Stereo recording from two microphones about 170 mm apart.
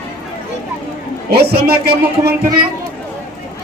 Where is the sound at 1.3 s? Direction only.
70° right (ahead or behind).